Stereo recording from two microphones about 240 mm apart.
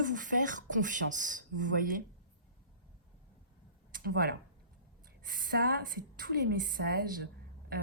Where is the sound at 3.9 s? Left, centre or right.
Right.